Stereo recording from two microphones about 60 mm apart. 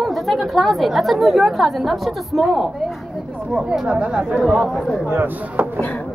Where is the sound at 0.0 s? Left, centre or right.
Centre.